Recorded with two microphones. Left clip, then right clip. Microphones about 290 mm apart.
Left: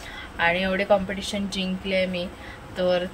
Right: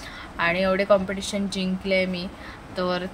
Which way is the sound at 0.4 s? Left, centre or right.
Centre.